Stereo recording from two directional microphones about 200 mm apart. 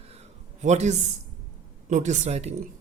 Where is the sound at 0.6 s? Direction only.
35° right (ahead or behind).